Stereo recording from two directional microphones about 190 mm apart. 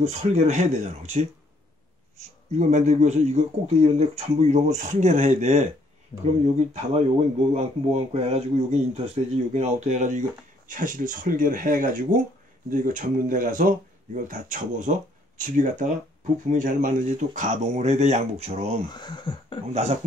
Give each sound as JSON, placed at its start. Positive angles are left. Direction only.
{"t": 0.0, "sound": "speech", "side_deg": -35}
{"t": 18.9, "sound": "speech", "side_deg": 25}
{"t": 19.7, "sound": "speech", "side_deg": -35}